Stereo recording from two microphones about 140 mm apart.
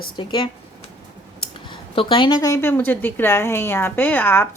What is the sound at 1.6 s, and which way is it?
A woman's voice, 40° left (ahead or behind).